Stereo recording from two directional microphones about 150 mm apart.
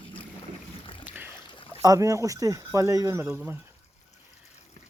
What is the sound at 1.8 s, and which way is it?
Speech, 20° right (ahead or behind).